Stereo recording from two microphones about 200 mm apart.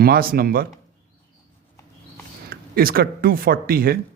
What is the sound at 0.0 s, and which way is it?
Speech, 50° right (ahead or behind).